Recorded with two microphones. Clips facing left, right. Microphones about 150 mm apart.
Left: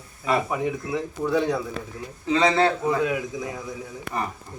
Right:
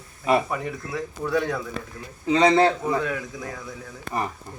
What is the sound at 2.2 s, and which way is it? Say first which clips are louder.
Speech: right 2 dB; 15° right (ahead or behind).